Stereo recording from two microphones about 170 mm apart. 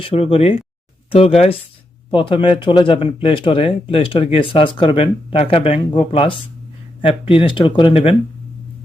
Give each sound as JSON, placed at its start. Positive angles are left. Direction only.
{"t": 0.0, "sound": "speech", "side_deg": 35}